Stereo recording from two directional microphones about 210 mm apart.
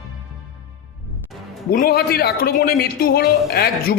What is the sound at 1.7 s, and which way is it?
A man's voice, 45° left (ahead or behind).